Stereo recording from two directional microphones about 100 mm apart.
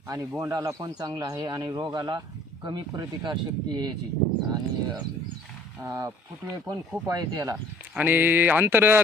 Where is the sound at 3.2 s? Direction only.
50° right (ahead or behind).